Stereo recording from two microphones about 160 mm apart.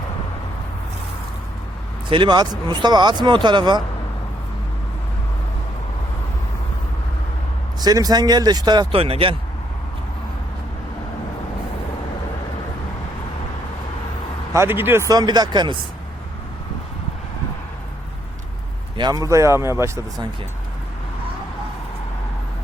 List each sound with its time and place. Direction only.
2.0 s speech: 30° right (ahead or behind)
7.8 s speech: 25° right (ahead or behind)
14.5 s speech: 15° right (ahead or behind)
18.9 s speech: 25° right (ahead or behind)